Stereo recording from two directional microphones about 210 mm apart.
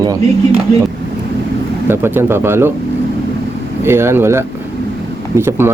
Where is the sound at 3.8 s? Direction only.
10° right (ahead or behind).